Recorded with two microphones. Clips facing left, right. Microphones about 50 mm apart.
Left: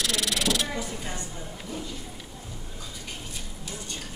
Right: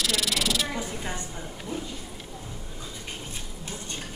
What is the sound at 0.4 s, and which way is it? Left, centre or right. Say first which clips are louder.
Snake: left 1 dB; centre.